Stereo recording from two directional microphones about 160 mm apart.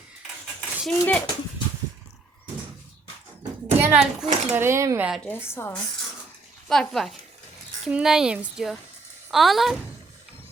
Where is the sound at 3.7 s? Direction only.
15° right (ahead or behind).